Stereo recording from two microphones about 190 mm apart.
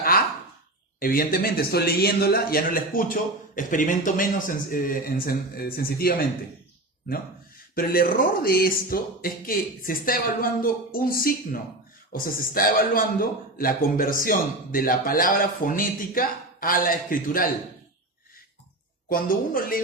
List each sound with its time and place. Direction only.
0.9 s a man's voice: 50° left (ahead or behind)
7.8 s a man's voice: 50° left (ahead or behind)
19.0 s a man's voice: 50° left (ahead or behind)